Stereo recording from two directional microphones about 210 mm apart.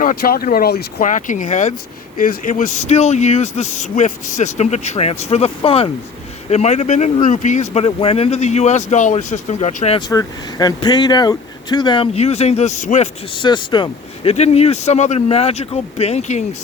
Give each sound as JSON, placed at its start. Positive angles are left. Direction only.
{"t": 0.0, "sound": "speech", "side_deg": 45}
{"t": 10.1, "sound": "speech", "side_deg": 15}
{"t": 13.4, "sound": "speech", "side_deg": 20}